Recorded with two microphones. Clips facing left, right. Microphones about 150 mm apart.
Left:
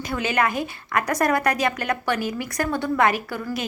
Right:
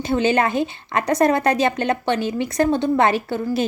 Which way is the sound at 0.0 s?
25° right (ahead or behind).